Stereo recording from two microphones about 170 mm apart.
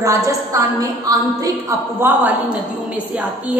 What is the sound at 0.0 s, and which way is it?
A woman's voice, 20° right (ahead or behind).